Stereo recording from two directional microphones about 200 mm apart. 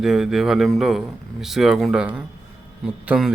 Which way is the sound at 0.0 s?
Centre (ahead or behind).